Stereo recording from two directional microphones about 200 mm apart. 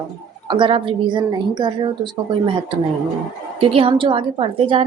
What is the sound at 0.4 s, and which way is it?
A woman's voice, 25° right (ahead or behind).